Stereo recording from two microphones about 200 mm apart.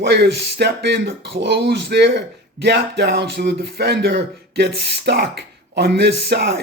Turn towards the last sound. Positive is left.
turn(degrees=-55)  # may be behind; listen again after turning